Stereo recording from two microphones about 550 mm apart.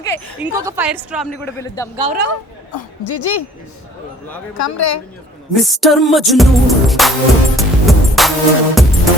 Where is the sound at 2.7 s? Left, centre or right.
Left.